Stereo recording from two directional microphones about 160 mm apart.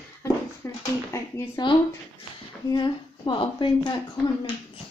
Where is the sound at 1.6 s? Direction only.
25° left (ahead or behind).